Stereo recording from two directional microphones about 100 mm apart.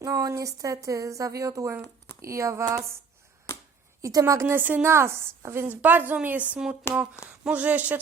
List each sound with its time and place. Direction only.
0.0 s a woman's voice: 35° right (ahead or behind)
4.0 s a woman's voice: 35° right (ahead or behind); by 8.0 s 15° right (ahead or behind)